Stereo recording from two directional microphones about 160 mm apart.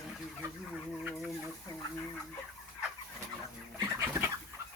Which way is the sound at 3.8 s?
15° right (ahead or behind).